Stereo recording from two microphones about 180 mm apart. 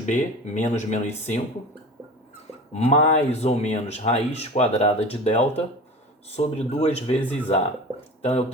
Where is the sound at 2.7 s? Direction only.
35° left (ahead or behind).